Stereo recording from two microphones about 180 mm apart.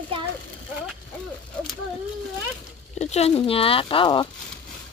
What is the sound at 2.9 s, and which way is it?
Speech, 40° left (ahead or behind).